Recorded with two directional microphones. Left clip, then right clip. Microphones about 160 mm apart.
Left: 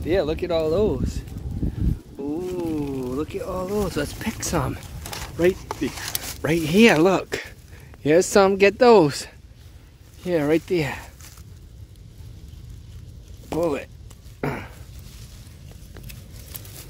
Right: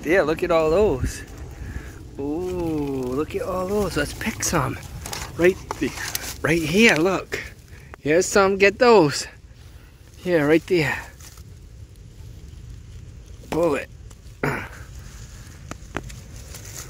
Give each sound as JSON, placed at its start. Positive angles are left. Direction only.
{"t": 0.0, "sound": "speech", "side_deg": -5}
{"t": 2.5, "sound": "a sound", "side_deg": 5}
{"t": 3.8, "sound": "speech", "side_deg": 30}
{"t": 5.8, "sound": "speech", "side_deg": 5}
{"t": 6.2, "sound": "a sound", "side_deg": 15}
{"t": 6.6, "sound": "speech", "side_deg": 35}
{"t": 10.2, "sound": "speech", "side_deg": 5}
{"t": 13.5, "sound": "speech", "side_deg": 5}
{"t": 14.4, "sound": "a sound", "side_deg": 5}